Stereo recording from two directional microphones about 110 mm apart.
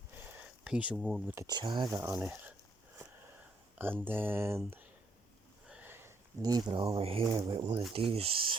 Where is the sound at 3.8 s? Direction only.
20° right (ahead or behind).